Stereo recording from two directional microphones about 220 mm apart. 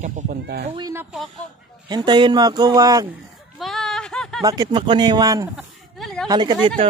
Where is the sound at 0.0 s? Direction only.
35° right (ahead or behind).